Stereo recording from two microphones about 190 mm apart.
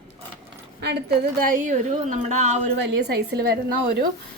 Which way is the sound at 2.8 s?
60° right (ahead or behind).